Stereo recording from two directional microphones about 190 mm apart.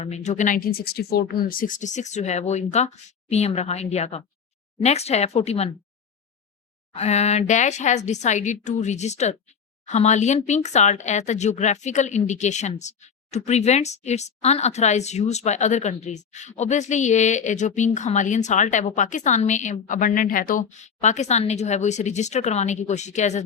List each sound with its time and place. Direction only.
0.0 s speech: 35° left (ahead or behind)
6.9 s speech: 35° left (ahead or behind)